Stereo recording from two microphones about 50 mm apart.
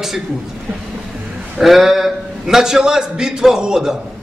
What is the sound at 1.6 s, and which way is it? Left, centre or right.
A man's voice, centre.